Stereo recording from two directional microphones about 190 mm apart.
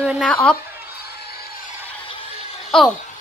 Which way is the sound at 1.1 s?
55° left (ahead or behind).